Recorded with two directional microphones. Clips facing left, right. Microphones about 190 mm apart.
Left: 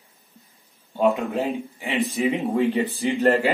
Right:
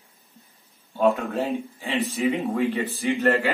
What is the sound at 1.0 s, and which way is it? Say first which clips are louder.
Speech: left 1 dB; 15° left (ahead or behind).